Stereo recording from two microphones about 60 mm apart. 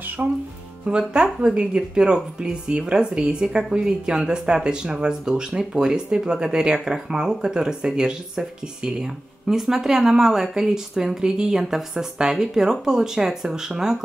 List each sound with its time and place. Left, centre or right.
0.2 s speech: right
0.8 s speech: centre